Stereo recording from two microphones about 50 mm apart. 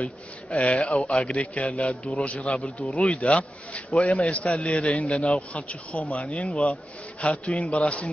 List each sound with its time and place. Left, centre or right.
0.0 s a man's voice: left